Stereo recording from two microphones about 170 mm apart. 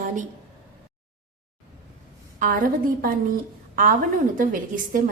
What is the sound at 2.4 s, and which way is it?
A woman's voice, 55° right (ahead or behind).